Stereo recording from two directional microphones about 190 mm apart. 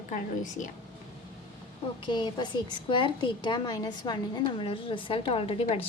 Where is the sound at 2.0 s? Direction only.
25° left (ahead or behind).